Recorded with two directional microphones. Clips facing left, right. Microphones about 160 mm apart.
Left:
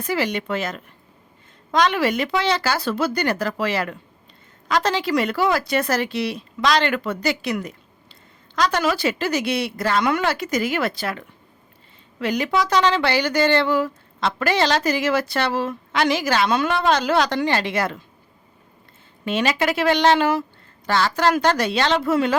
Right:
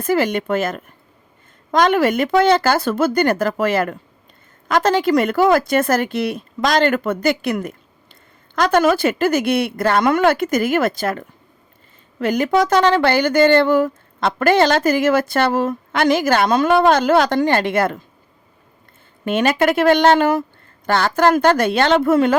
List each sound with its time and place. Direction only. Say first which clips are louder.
0.0 s speech: right 6 dB; 50° right (ahead or behind)
19.2 s speech: right 5 dB; 50° right (ahead or behind)